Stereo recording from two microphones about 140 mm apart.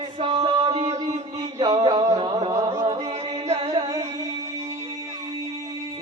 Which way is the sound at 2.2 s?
40° right (ahead or behind).